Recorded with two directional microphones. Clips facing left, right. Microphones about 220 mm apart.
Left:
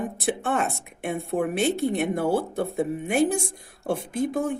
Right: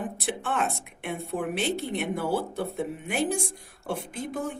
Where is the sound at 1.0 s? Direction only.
45° left (ahead or behind).